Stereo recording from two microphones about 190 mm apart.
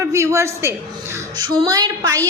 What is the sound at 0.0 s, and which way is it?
A woman's voice, 15° right (ahead or behind).